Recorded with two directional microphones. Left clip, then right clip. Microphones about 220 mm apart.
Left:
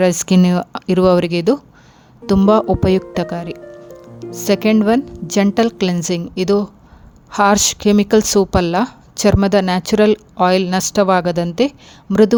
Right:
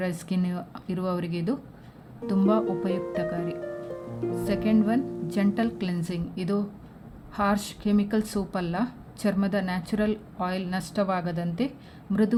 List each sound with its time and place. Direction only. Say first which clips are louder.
0.0 s a woman's voice: left 17 dB; 50° left (ahead or behind)
3.6 s music: even; centre (ahead or behind)
4.4 s a woman's voice: left 13 dB; 50° left (ahead or behind)